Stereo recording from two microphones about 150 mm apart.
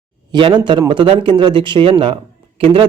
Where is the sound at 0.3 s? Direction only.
30° right (ahead or behind).